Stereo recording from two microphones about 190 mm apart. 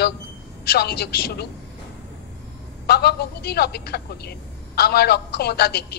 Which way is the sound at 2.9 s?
55° left (ahead or behind).